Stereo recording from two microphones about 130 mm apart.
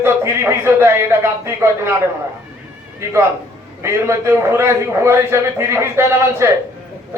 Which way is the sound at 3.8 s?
20° right (ahead or behind).